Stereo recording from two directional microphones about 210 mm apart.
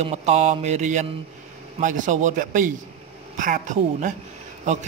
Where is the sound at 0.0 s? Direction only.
30° right (ahead or behind).